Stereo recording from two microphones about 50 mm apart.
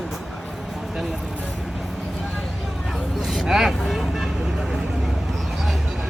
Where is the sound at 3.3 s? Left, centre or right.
Centre.